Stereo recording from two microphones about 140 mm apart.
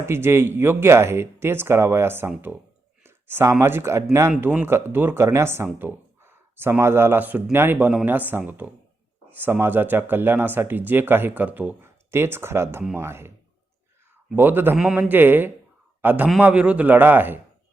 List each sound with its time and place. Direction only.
0.0 s speech: 15° right (ahead or behind)
14.3 s a man's voice: 15° right (ahead or behind)